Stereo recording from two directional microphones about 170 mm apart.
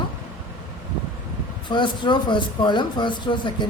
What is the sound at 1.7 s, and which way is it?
Speech, 25° left (ahead or behind).